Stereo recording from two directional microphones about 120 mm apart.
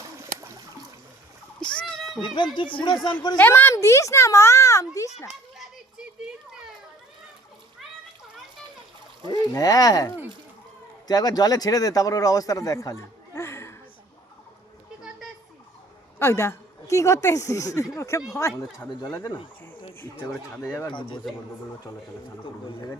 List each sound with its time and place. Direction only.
1.7 s a sound: 5° left (ahead or behind)
2.2 s speech: 40° left (ahead or behind)
3.3 s a woman's voice: 15° left (ahead or behind)
5.5 s children playing: 5° right (ahead or behind)
9.3 s speech: 30° left (ahead or behind)
16.1 s a woman's voice: 20° left (ahead or behind)
20.6 s a woman's voice: 20° left (ahead or behind)
20.8 s speech: 40° left (ahead or behind)